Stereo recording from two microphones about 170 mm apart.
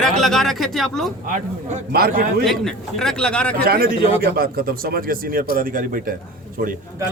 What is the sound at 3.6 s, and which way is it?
A man's voice, 60° right (ahead or behind).